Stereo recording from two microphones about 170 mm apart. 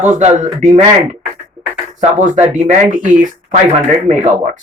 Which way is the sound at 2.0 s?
45° right (ahead or behind).